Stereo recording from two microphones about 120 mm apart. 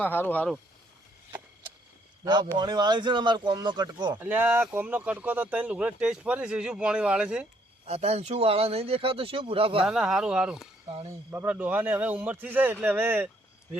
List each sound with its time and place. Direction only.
0.0 s speech: 15° left (ahead or behind)
2.2 s speech: 35° right (ahead or behind)
4.2 s speech: 15° right (ahead or behind)
7.9 s speech: 65° right (ahead or behind)
9.8 s speech: 5° right (ahead or behind)